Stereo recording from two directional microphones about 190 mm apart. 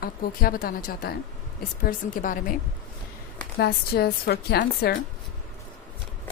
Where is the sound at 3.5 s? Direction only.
55° left (ahead or behind).